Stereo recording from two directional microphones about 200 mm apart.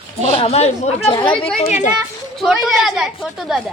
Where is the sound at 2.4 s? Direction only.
Centre (ahead or behind).